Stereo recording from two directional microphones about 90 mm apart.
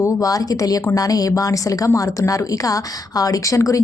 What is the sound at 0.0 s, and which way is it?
A woman's voice, 40° left (ahead or behind).